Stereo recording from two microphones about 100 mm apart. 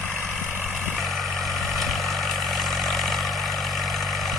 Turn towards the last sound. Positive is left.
turn(degrees=0)  # may be behind; listen again after turning